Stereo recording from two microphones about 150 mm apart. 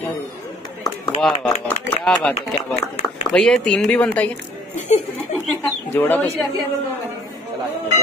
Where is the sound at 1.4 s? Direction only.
10° left (ahead or behind).